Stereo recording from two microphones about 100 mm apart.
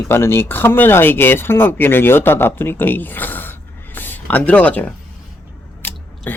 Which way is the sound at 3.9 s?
20° left (ahead or behind).